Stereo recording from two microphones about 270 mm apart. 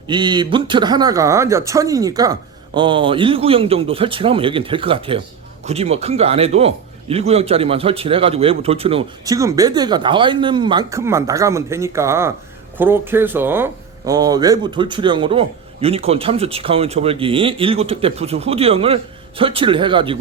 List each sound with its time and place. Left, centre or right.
0.1 s a man's voice: centre